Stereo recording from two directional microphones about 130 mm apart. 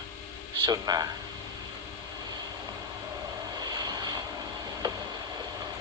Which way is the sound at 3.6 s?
30° right (ahead or behind).